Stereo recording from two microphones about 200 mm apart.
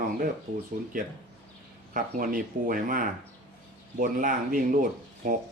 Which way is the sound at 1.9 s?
45° right (ahead or behind).